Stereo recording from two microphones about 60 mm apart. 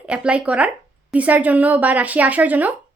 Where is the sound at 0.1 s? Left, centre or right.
Centre.